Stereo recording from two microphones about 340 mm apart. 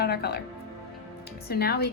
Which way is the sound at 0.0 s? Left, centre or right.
Left.